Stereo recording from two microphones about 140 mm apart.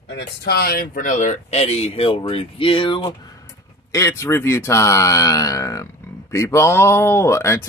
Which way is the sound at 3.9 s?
20° left (ahead or behind).